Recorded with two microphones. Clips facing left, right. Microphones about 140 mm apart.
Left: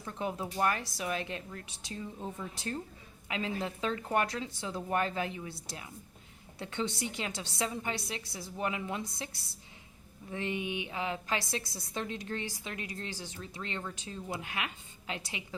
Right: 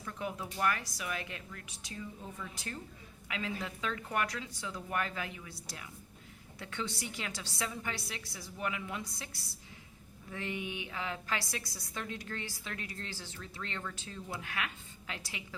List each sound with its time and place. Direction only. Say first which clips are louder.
0.0 s a woman's voice: left 3 dB; 30° left (ahead or behind)